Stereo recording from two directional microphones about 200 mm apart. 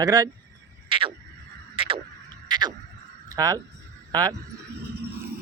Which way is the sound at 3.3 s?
15° right (ahead or behind).